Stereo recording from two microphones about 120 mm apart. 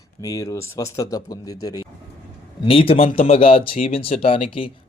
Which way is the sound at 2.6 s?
50° left (ahead or behind).